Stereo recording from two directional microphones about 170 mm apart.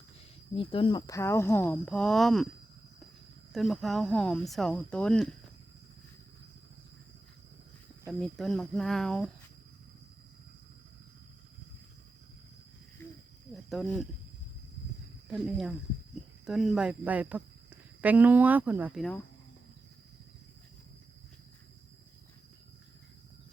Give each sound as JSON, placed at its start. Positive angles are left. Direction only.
{"t": 0.5, "sound": "speech", "side_deg": 30}
{"t": 3.5, "sound": "speech", "side_deg": 0}
{"t": 8.2, "sound": "speech", "side_deg": 0}
{"t": 13.7, "sound": "speech", "side_deg": 0}
{"t": 15.3, "sound": "speech", "side_deg": 0}